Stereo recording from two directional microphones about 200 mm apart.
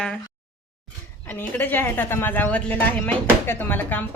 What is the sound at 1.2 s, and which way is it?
Speech, 10° left (ahead or behind).